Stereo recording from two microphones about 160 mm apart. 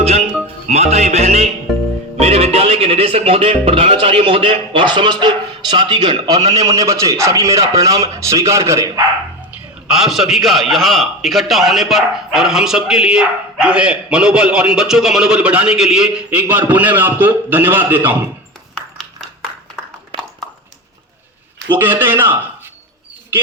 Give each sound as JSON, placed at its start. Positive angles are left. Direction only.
{"t": 0.4, "sound": "speech", "side_deg": -40}
{"t": 1.7, "sound": "music", "side_deg": 0}
{"t": 2.1, "sound": "a man's voice", "side_deg": -40}
{"t": 9.5, "sound": "a man's voice", "side_deg": -5}
{"t": 18.7, "sound": "a sound", "side_deg": 5}
{"t": 20.1, "sound": "a sound", "side_deg": -35}
{"t": 21.7, "sound": "speech", "side_deg": -10}